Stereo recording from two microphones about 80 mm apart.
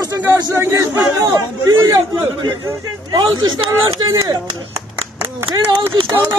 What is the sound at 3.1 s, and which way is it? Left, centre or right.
Speech, right.